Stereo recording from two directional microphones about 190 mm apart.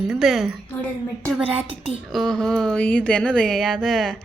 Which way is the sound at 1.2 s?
5° left (ahead or behind).